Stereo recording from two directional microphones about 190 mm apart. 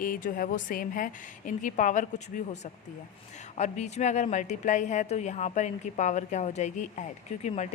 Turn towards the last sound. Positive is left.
turn(degrees=35)  # may be behind; listen again after turning